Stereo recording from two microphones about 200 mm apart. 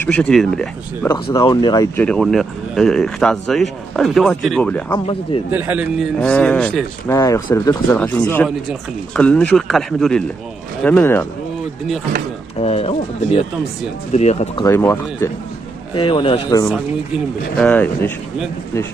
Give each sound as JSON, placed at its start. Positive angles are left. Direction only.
{"t": 0.0, "sound": "speech", "side_deg": 5}
{"t": 1.0, "sound": "speech", "side_deg": 20}
{"t": 2.0, "sound": "speech", "side_deg": 5}
{"t": 5.5, "sound": "a man's voice", "side_deg": -10}
{"t": 6.1, "sound": "speech", "side_deg": 5}
{"t": 12.5, "sound": "speech", "side_deg": 30}
{"t": 14.6, "sound": "speech", "side_deg": 15}
{"t": 15.9, "sound": "speech", "side_deg": 25}
{"t": 17.6, "sound": "speech", "side_deg": 5}